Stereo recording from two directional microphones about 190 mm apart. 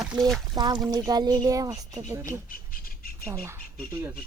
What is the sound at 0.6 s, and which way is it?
Speech, 20° right (ahead or behind).